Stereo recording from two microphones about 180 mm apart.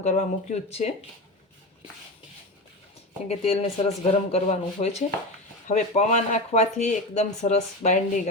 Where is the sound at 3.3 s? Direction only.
35° left (ahead or behind).